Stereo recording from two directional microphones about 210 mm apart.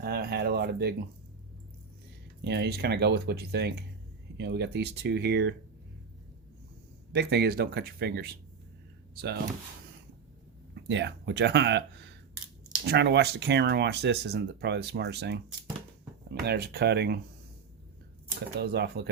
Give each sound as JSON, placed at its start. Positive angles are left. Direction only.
{"t": 0.0, "sound": "speech", "side_deg": -50}
{"t": 2.4, "sound": "speech", "side_deg": -50}
{"t": 7.1, "sound": "speech", "side_deg": -50}
{"t": 10.8, "sound": "speech", "side_deg": -55}
{"t": 18.3, "sound": "speech", "side_deg": -50}